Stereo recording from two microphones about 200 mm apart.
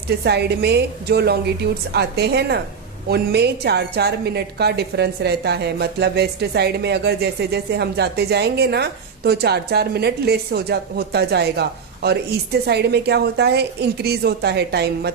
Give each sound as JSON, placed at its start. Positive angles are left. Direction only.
{"t": 0.3, "sound": "a woman's voice", "side_deg": -55}